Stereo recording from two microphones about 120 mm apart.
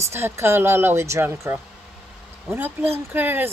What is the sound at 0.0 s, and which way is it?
Speech, 20° right (ahead or behind).